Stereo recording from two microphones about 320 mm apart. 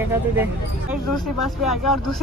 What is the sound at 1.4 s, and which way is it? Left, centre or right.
Speech, left.